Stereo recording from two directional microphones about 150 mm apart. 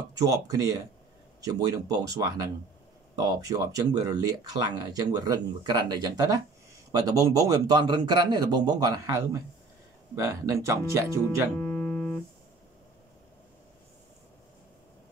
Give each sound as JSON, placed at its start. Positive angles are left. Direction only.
{"t": 0.1, "sound": "speech", "side_deg": -25}
{"t": 11.6, "sound": "music", "side_deg": 5}